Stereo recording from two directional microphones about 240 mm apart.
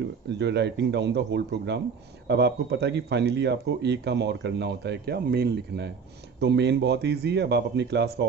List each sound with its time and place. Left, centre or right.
0.3 s speech: right